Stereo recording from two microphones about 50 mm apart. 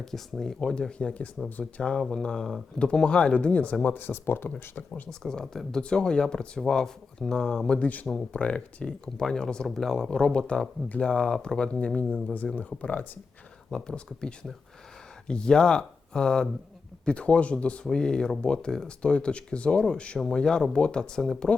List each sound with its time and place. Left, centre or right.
0.0 s speech: centre
3.3 s speech: left
3.8 s speech: left
5.2 s speech: centre
7.7 s speech: left
11.9 s speech: left
13.7 s speech: centre